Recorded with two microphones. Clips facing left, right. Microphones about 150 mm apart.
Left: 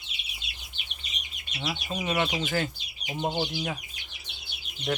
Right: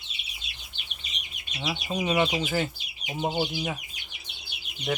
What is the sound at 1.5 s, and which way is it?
Speech, 10° right (ahead or behind).